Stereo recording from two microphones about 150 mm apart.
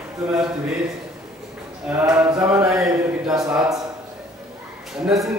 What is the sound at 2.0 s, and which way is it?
Mantra, 20° right (ahead or behind).